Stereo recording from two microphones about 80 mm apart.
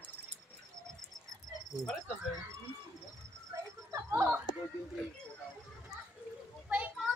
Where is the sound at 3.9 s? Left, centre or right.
Right.